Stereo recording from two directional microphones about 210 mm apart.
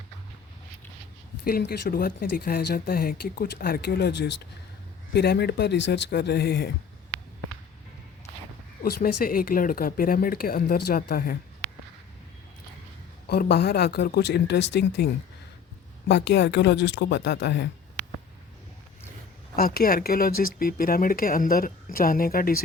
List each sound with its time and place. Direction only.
1.5 s speech: 45° left (ahead or behind)
8.8 s speech: 45° left (ahead or behind)
13.2 s speech: 50° left (ahead or behind)
19.5 s speech: 45° left (ahead or behind)